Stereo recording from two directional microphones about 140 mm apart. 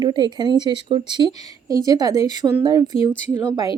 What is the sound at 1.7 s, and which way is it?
Speech, 25° right (ahead or behind).